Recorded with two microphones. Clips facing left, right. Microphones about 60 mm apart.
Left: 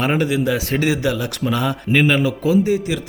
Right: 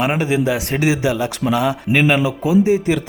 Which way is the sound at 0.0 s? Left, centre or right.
Centre.